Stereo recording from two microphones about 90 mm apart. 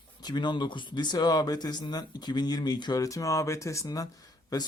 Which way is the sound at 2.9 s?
40° left (ahead or behind).